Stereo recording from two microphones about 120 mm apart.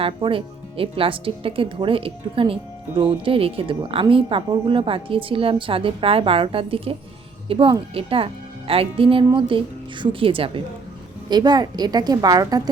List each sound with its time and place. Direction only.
0.0 s a woman's voice: 50° right (ahead or behind)
11.3 s a woman's voice: 35° right (ahead or behind)